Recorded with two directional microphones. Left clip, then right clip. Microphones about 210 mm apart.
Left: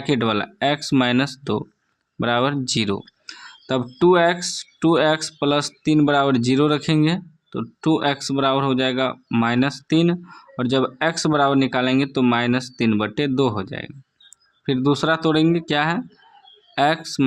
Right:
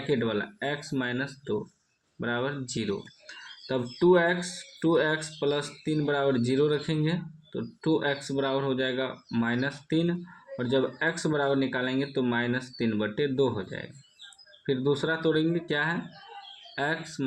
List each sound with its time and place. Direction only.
0.1 s speech: 45° left (ahead or behind)